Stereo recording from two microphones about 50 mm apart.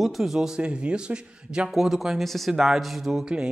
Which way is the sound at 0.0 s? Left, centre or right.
Centre.